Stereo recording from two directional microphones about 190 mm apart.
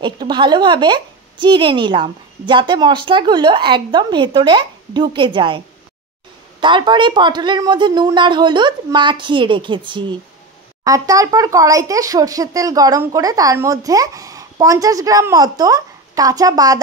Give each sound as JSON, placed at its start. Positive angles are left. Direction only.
{"t": 0.0, "sound": "speech", "side_deg": -25}
{"t": 6.6, "sound": "speech", "side_deg": -25}